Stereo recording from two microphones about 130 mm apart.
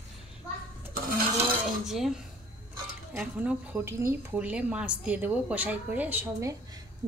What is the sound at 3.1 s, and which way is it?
A woman's voice, 5° right (ahead or behind).